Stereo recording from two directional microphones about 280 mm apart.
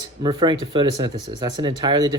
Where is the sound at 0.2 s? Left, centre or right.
Centre.